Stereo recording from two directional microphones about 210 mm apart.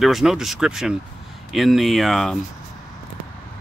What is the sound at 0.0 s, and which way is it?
Speech, centre (ahead or behind).